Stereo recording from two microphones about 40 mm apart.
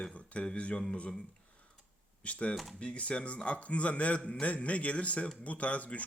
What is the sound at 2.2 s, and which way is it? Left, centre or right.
Speech, left.